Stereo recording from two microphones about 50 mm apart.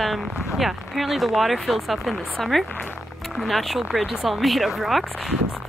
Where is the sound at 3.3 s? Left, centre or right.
Centre.